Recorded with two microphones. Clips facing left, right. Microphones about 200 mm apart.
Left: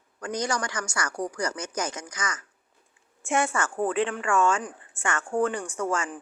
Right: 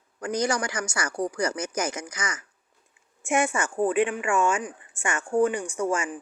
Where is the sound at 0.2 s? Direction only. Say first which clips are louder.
Right 3 dB; 20° right (ahead or behind).